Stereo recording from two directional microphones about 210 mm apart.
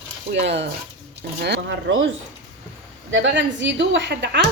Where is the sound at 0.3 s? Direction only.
55° right (ahead or behind).